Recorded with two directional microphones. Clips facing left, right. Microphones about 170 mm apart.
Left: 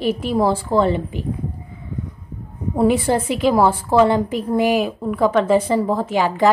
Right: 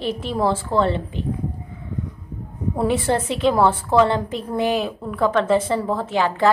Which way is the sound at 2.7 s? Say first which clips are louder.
Left 4 dB; 10° left (ahead or behind).